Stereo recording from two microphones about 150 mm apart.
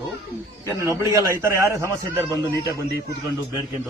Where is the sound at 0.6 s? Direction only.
20° right (ahead or behind).